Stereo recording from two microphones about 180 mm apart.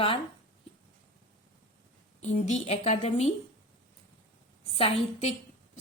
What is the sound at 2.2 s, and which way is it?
A woman's voice, 40° left (ahead or behind).